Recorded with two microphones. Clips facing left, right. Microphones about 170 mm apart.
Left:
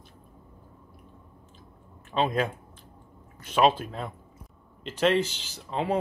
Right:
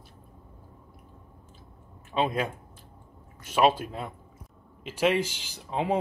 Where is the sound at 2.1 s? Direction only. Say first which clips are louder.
Left 1 dB; 10° right (ahead or behind).